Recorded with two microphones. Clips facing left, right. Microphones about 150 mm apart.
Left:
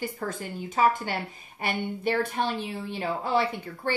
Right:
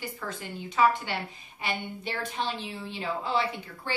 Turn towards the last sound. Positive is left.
turn(degrees=50)  # may be behind; listen again after turning